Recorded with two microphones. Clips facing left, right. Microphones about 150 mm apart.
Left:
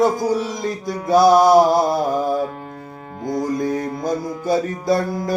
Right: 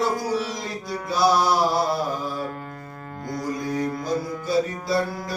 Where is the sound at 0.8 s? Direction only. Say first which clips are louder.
Left 8 dB; 50° left (ahead or behind).